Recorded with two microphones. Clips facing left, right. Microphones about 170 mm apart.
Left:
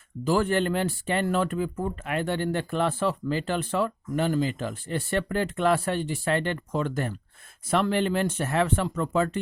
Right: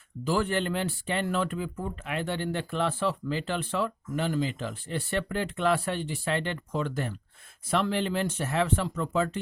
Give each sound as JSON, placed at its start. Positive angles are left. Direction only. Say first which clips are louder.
{"t": 0.3, "sound": "speech", "louder": "left 4 dB", "side_deg": 45}